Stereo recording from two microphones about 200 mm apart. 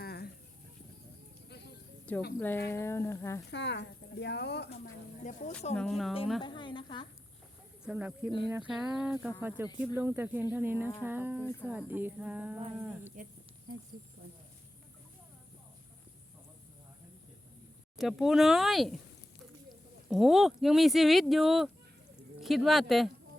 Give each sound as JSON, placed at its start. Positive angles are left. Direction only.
{"t": 0.0, "sound": "a sound", "side_deg": 55}
{"t": 2.1, "sound": "a woman's voice", "side_deg": 10}
{"t": 3.5, "sound": "speech", "side_deg": 60}
{"t": 5.7, "sound": "speech", "side_deg": 5}
{"t": 6.4, "sound": "a woman's voice", "side_deg": 25}
{"t": 7.9, "sound": "a sound", "side_deg": -5}
{"t": 8.4, "sound": "speech", "side_deg": -10}
{"t": 9.4, "sound": "a sound", "side_deg": -10}
{"t": 17.9, "sound": "speech", "side_deg": 0}
{"t": 20.1, "sound": "speech", "side_deg": 0}